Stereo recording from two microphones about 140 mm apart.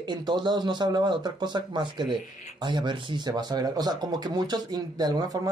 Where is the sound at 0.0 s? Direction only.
30° right (ahead or behind).